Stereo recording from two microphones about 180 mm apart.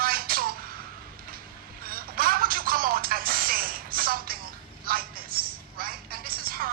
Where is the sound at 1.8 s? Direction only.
55° right (ahead or behind).